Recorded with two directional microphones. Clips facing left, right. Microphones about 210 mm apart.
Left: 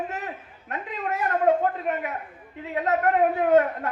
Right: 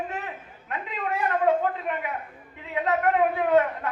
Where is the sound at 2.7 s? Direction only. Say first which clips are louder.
Left 1 dB; 45° left (ahead or behind).